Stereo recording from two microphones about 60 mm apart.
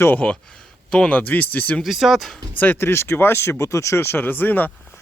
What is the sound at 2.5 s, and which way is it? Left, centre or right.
Speech, left.